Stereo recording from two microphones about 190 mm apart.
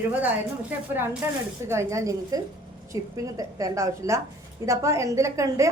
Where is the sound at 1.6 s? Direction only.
15° right (ahead or behind).